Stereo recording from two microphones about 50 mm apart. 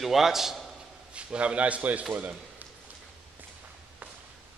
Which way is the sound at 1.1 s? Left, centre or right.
Right.